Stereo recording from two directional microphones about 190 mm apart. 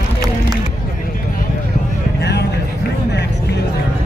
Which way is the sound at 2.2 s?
60° left (ahead or behind).